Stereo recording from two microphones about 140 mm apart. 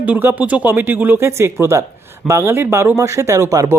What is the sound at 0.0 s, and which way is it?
Speech, 15° right (ahead or behind).